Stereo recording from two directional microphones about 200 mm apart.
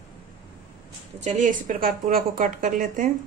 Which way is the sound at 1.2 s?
40° right (ahead or behind).